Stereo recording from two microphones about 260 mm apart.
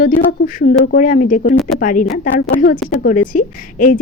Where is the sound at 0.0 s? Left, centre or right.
Left.